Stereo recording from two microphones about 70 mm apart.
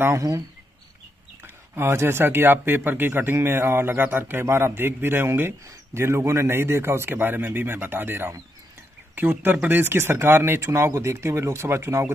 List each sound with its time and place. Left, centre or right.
1.4 s speech: right